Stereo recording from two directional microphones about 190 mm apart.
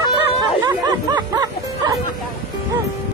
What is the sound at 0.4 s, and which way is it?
Music, 20° right (ahead or behind).